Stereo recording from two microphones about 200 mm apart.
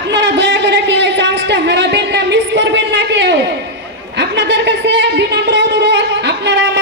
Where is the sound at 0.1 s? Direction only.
60° right (ahead or behind).